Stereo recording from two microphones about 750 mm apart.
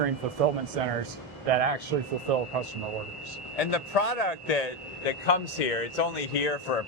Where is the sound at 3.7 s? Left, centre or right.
Left.